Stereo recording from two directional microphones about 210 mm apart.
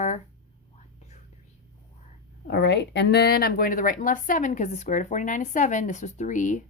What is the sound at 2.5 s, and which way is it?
A woman's voice, 55° left (ahead or behind).